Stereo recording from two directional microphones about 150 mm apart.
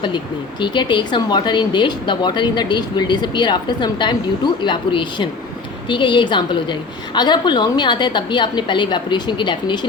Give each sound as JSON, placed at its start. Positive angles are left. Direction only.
{"t": 0.6, "sound": "a woman's voice", "side_deg": 30}